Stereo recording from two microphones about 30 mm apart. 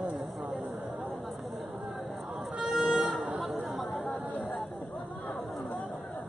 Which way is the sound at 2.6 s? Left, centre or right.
Centre.